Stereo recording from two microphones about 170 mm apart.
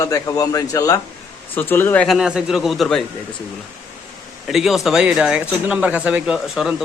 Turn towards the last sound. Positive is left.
turn(degrees=0)  # may be behind; listen again after turning